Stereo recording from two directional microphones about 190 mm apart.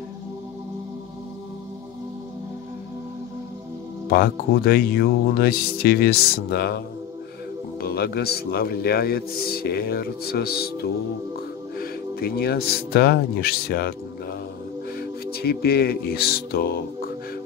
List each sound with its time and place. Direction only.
4.1 s a man's voice: 55° left (ahead or behind)
7.8 s a man's voice: 55° left (ahead or behind)
15.0 s music: 55° left (ahead or behind)